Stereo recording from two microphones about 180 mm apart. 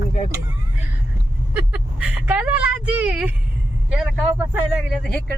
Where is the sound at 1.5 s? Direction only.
10° right (ahead or behind).